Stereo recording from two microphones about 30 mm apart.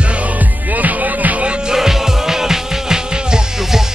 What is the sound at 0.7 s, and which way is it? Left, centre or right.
Music, right.